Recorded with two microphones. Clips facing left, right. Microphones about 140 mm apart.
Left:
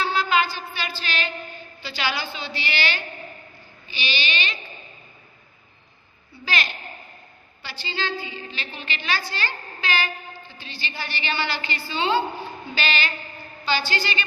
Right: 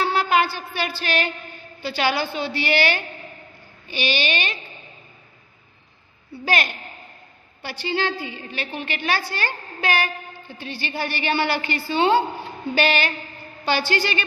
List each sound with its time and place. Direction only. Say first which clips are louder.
0.0 s a sound: right 2 dB; 60° right (ahead or behind)
1.8 s a woman's voice: right 6 dB; 50° right (ahead or behind)
6.4 s a woman's voice: right 5 dB; 55° right (ahead or behind)